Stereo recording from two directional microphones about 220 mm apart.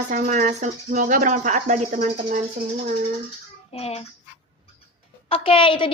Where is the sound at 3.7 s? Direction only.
25° left (ahead or behind).